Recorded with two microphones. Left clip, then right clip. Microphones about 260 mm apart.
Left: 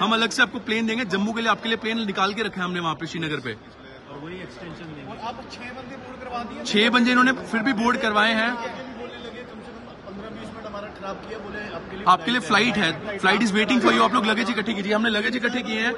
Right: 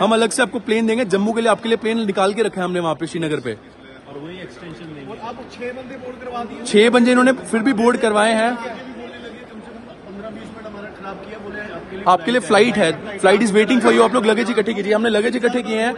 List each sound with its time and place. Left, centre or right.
0.0 s a man's voice: centre
6.6 s a man's voice: centre
12.0 s a man's voice: centre
15.1 s a man's voice: centre